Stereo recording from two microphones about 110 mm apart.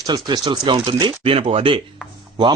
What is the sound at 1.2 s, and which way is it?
Speech, 60° right (ahead or behind).